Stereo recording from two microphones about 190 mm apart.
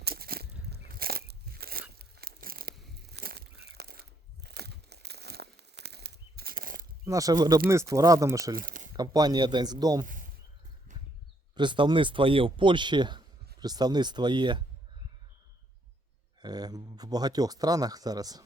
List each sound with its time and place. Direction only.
0.0 s a sound: 55° right (ahead or behind)
0.7 s biting: 55° right (ahead or behind)
2.0 s a sound: 55° right (ahead or behind)
3.1 s crumpling: 55° right (ahead or behind)
7.0 s speech: 15° right (ahead or behind)
8.5 s a sound: 45° right (ahead or behind)
9.0 s speech: 20° right (ahead or behind)
11.5 s speech: 25° right (ahead or behind)
16.4 s speech: 20° right (ahead or behind)